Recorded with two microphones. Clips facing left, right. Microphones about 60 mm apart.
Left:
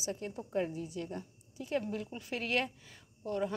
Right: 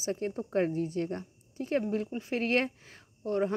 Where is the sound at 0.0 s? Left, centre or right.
Right.